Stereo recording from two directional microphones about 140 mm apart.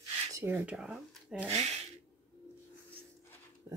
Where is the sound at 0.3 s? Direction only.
15° right (ahead or behind).